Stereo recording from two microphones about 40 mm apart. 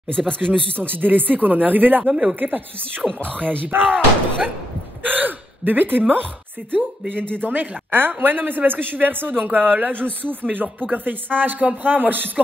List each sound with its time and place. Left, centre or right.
0.4 s speech: right